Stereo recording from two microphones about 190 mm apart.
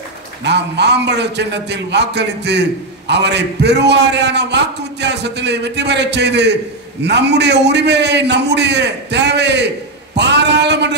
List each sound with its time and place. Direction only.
0.4 s a man's voice: 65° right (ahead or behind)